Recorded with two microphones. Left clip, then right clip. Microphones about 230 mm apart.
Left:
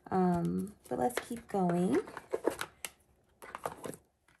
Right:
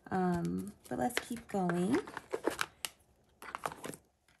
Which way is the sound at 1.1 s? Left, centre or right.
Centre.